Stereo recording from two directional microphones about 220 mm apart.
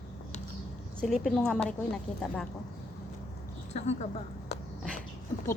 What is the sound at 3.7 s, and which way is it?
Speech, 30° left (ahead or behind).